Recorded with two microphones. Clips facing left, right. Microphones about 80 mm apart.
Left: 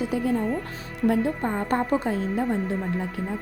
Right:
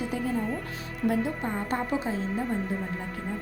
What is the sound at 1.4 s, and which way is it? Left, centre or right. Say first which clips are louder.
Speech: left 5 dB; left.